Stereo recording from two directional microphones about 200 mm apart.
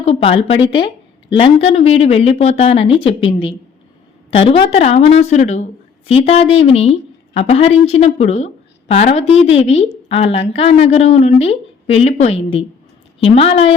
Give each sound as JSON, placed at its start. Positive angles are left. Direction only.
{"t": 0.0, "sound": "a woman's voice", "side_deg": 30}